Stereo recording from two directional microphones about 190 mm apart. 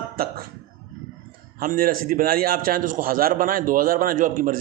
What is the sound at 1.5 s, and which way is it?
A man's voice, 50° right (ahead or behind).